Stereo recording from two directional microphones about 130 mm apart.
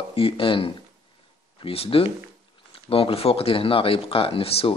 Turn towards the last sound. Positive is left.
turn(degrees=45)  # may be behind; listen again after turning